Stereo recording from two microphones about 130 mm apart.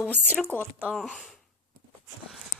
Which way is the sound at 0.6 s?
15° right (ahead or behind).